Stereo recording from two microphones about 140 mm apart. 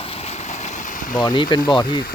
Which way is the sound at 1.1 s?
30° left (ahead or behind).